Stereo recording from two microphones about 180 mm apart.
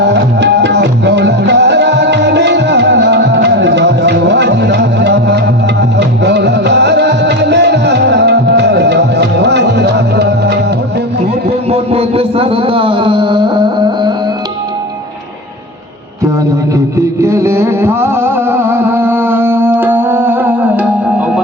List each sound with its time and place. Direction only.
0.0 s music: 75° right (ahead or behind)
11.4 s a sound: 35° right (ahead or behind)
16.7 s music: 15° right (ahead or behind)